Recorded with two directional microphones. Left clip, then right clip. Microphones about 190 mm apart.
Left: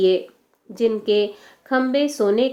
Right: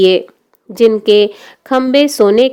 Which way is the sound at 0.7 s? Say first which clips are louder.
Right 10 dB; 55° right (ahead or behind).